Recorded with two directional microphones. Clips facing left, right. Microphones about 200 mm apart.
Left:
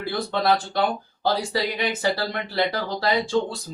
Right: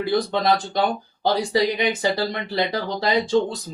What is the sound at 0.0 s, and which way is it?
Speech, 15° right (ahead or behind).